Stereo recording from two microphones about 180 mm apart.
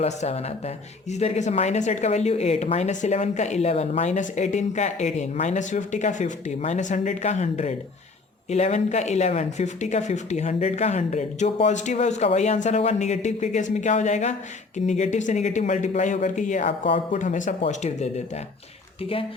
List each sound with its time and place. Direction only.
0.0 s speech: 35° left (ahead or behind)
16.8 s speech: 30° left (ahead or behind)
17.2 s speech: 45° left (ahead or behind)